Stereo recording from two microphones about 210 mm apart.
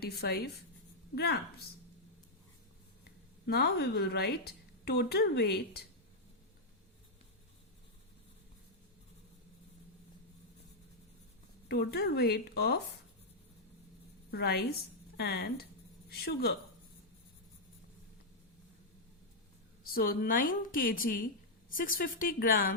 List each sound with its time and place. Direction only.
0.0 s a woman's voice: 50° left (ahead or behind)
3.4 s a woman's voice: 50° left (ahead or behind)
11.7 s a woman's voice: 50° left (ahead or behind)
14.3 s a woman's voice: 50° left (ahead or behind)
19.8 s a woman's voice: 45° left (ahead or behind)